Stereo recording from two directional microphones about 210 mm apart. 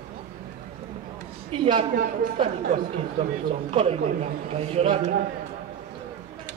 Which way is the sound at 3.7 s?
30° right (ahead or behind).